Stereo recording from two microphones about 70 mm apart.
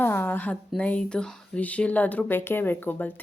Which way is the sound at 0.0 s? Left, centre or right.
Left.